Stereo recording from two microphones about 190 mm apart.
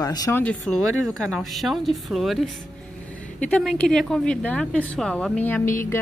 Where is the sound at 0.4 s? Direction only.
5° left (ahead or behind).